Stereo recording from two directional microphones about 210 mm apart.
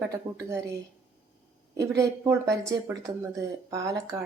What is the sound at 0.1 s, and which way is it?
Speech, 15° right (ahead or behind).